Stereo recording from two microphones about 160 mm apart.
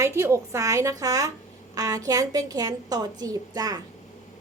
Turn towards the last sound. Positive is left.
turn(degrees=-25)  # may be behind; listen again after turning